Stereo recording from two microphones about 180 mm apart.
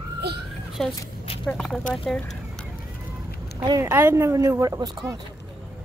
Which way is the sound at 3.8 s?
10° right (ahead or behind).